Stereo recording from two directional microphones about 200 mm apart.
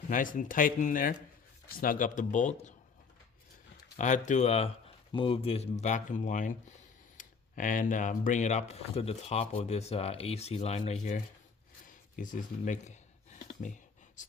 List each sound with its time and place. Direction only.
0.1 s speech: 40° left (ahead or behind)
3.9 s speech: 40° left (ahead or behind)
12.1 s speech: 40° left (ahead or behind)
14.2 s speech: 40° left (ahead or behind)